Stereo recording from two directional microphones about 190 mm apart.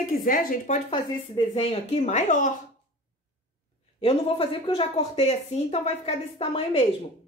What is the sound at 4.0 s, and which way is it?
A woman's voice, 30° left (ahead or behind).